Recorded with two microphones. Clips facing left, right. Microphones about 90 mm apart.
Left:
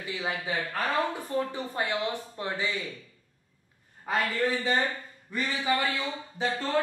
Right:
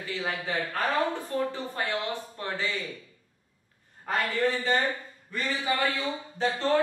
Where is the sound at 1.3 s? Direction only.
15° left (ahead or behind).